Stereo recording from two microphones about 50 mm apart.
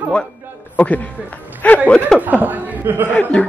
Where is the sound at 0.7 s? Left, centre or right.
Left.